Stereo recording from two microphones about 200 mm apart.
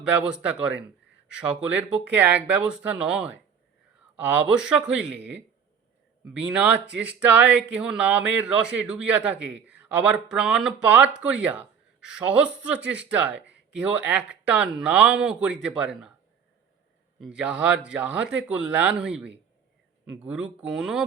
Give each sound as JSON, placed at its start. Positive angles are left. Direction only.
{"t": 0.0, "sound": "speech", "side_deg": -5}
{"t": 17.2, "sound": "speech", "side_deg": -5}